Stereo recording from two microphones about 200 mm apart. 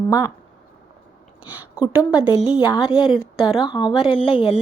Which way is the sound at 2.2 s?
25° left (ahead or behind).